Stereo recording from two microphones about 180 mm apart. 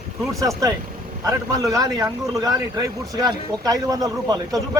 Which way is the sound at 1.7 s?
20° right (ahead or behind).